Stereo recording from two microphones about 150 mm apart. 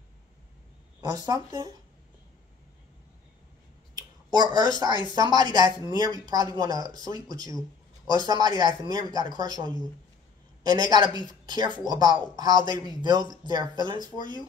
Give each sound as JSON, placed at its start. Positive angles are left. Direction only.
{"t": 1.0, "sound": "a woman's voice", "side_deg": -25}
{"t": 3.9, "sound": "a sound", "side_deg": -25}
{"t": 5.2, "sound": "a woman's voice", "side_deg": -30}